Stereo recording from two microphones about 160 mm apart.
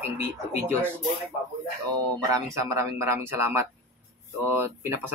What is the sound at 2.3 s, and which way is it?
A man's voice, 20° right (ahead or behind).